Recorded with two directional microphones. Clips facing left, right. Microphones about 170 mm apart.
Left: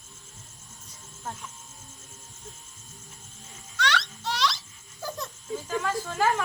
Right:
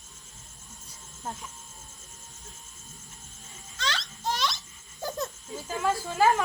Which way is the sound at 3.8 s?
75° left (ahead or behind).